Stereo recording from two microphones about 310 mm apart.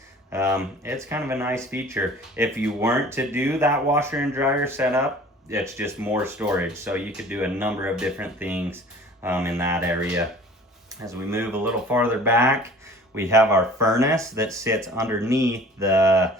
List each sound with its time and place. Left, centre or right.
0.3 s speech: centre